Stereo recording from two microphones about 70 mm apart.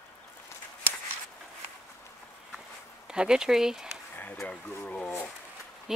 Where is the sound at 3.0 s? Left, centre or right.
Centre.